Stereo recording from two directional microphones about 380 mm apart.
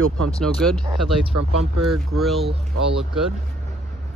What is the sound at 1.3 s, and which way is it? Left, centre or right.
Speech, right.